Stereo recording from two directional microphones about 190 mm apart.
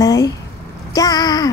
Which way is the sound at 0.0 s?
20° left (ahead or behind).